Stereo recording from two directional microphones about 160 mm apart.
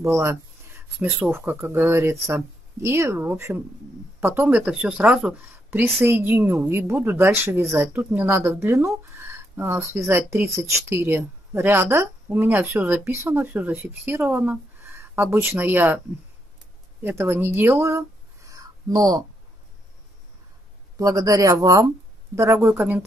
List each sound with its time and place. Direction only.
0.2 s speech: 15° right (ahead or behind)
17.0 s speech: 15° right (ahead or behind)
21.0 s a man's voice: 20° right (ahead or behind)
22.6 s speech: 5° right (ahead or behind)